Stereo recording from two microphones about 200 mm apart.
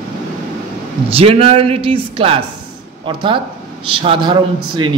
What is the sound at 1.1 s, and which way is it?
A man's voice, 30° right (ahead or behind).